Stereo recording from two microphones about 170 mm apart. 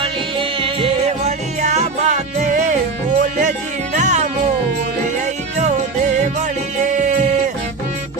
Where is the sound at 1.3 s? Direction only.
45° right (ahead or behind).